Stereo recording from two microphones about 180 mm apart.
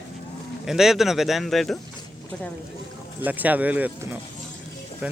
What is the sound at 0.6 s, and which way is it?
Speech, centre (ahead or behind).